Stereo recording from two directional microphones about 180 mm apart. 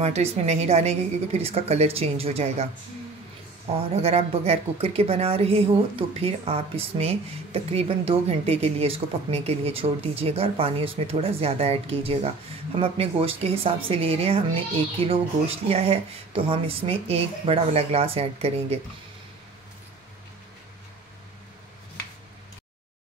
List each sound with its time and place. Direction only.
0.0 s speech: 35° right (ahead or behind)
3.7 s speech: 35° right (ahead or behind)